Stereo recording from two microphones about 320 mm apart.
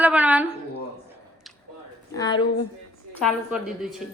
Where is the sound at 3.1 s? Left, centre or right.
Centre.